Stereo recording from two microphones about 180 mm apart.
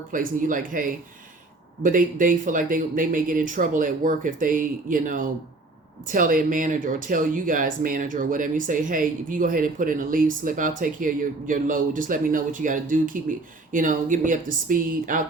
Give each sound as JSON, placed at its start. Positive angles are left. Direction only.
{"t": 0.1, "sound": "speech", "side_deg": -50}